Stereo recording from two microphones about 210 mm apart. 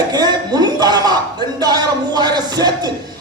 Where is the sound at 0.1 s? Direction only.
20° right (ahead or behind).